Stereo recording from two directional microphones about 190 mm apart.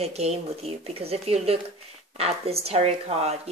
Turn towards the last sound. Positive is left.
turn(degrees=-35)  # may be behind; listen again after turning